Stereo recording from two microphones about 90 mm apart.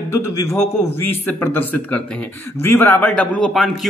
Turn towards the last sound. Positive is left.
turn(degrees=0)  # may be behind; listen again after turning